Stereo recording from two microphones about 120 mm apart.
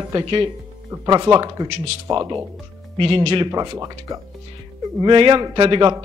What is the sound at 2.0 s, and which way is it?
Speech, 25° right (ahead or behind).